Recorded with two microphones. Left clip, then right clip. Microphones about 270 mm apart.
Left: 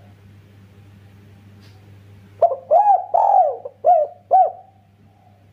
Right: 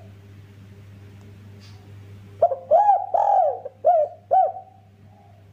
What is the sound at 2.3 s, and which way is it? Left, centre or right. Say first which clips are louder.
Bird: left 3 dB; centre.